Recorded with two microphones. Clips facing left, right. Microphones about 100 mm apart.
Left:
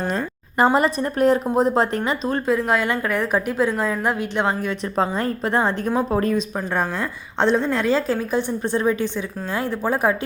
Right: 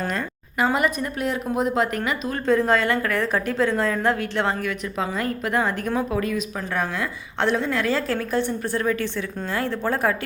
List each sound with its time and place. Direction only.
0.6 s a woman's voice: 35° left (ahead or behind)
2.5 s speech: 5° left (ahead or behind)
2.8 s a woman's voice: 15° left (ahead or behind)
4.9 s a woman's voice: 30° left (ahead or behind)
6.1 s a woman's voice: 35° left (ahead or behind)
6.7 s a woman's voice: 25° left (ahead or behind)